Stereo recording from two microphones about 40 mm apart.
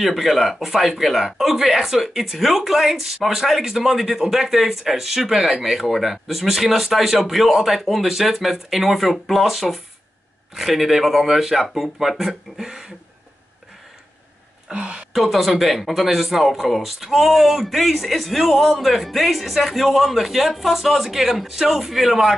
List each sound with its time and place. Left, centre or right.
0.0 s speech: centre
14.7 s a woman's voice: right
15.1 s speech: centre